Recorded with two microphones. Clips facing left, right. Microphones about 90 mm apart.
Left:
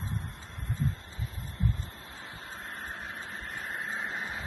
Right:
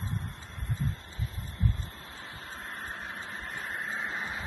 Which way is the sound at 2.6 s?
Centre (ahead or behind).